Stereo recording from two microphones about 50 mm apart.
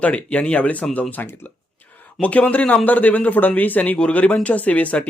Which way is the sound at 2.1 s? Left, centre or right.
Left.